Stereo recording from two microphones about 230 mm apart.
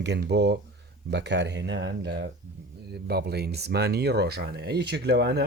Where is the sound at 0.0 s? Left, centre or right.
Right.